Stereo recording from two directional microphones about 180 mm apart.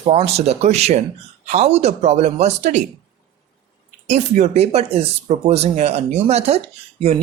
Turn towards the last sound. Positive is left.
turn(degrees=-35)  # may be behind; listen again after turning